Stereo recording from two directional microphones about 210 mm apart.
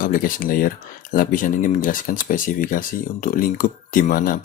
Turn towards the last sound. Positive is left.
turn(degrees=40)  # may be behind; listen again after turning